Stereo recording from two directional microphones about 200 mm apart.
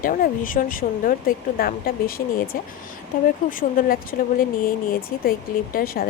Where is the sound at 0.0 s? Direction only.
45° left (ahead or behind).